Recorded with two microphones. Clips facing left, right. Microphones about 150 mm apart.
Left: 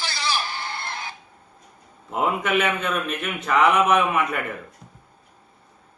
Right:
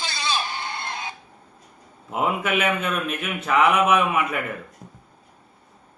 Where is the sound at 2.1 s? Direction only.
5° right (ahead or behind).